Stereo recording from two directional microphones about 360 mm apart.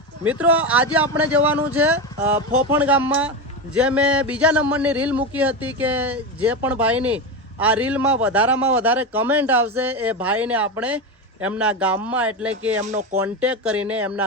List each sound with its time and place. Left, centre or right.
0.3 s a man's voice: centre
12.8 s speech: centre
13.1 s a man's voice: centre